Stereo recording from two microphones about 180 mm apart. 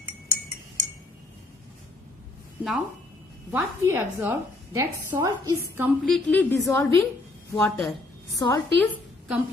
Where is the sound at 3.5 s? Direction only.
15° right (ahead or behind).